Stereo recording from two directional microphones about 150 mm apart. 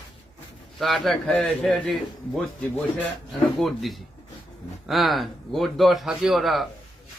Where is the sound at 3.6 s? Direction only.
Centre (ahead or behind).